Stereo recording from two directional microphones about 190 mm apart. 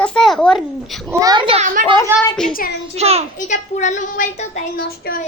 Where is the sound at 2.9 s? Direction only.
30° right (ahead or behind).